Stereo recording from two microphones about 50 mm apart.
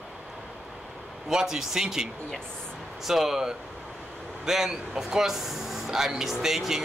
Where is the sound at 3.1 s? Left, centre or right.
Centre.